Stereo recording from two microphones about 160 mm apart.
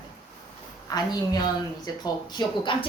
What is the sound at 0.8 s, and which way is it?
A woman's voice, 25° left (ahead or behind).